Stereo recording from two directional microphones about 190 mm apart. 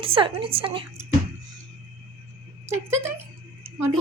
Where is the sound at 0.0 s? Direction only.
30° right (ahead or behind).